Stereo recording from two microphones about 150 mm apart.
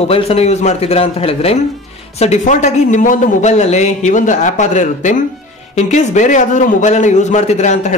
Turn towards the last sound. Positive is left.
turn(degrees=50)  # may be behind; listen again after turning